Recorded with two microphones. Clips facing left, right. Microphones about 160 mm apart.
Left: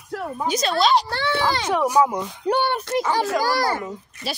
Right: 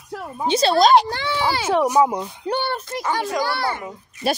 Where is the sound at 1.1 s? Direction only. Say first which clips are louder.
Even; 15° right (ahead or behind).